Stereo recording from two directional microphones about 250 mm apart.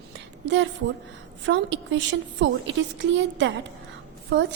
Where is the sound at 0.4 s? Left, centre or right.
Right.